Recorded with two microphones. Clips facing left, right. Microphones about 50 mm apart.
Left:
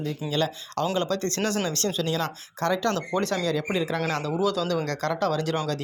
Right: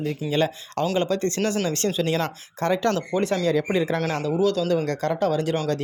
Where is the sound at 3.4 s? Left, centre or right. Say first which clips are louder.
Right 5 dB; right.